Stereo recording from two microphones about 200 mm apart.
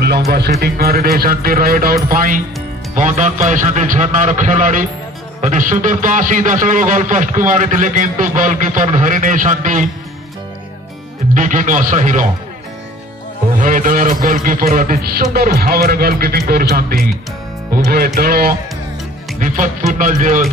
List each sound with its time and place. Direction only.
0.3 s a man's voice: 50° right (ahead or behind)
11.3 s a man's voice: 40° right (ahead or behind)
13.6 s a man's voice: 40° right (ahead or behind)